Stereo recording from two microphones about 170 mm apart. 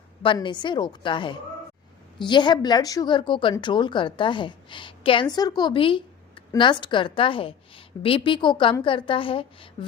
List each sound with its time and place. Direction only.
0.2 s a woman's voice: 30° left (ahead or behind)